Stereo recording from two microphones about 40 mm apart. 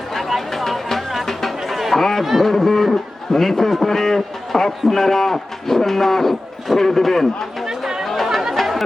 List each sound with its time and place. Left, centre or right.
0.1 s music: centre
2.2 s a man's voice: centre
7.6 s chatter: centre
8.0 s chatter: centre